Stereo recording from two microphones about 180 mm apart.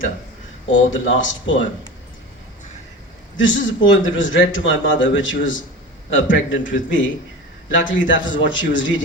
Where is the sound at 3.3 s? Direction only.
90° left.